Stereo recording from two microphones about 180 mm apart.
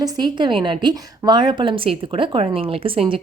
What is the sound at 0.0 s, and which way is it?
A woman's voice, 25° right (ahead or behind).